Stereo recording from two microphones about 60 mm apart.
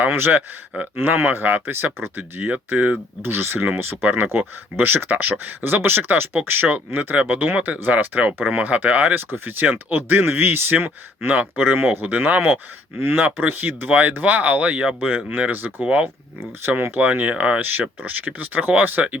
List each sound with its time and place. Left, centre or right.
0.0 s speech: right
17.6 s speech: right